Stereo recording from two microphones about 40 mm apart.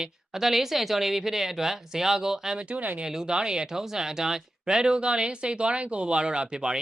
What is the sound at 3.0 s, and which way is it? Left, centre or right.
Speech, centre.